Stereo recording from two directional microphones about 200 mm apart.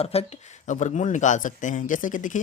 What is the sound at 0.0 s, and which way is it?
Speech, 30° left (ahead or behind).